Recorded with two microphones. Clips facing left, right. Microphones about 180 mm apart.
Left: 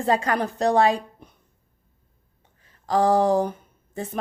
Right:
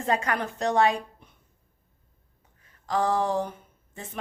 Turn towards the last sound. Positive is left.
turn(degrees=35)  # may be behind; listen again after turning